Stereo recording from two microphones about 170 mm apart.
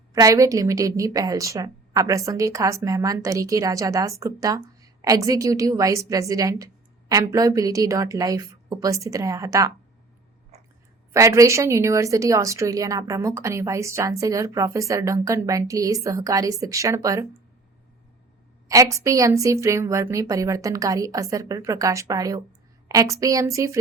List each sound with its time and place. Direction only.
0.1 s speech: 20° right (ahead or behind)
11.1 s speech: 15° right (ahead or behind)
18.7 s speech: 20° right (ahead or behind)